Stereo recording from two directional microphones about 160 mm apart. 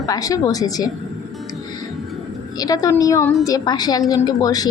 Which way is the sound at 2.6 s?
25° left (ahead or behind).